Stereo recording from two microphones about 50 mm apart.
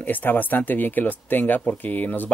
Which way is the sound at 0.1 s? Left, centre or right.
Left.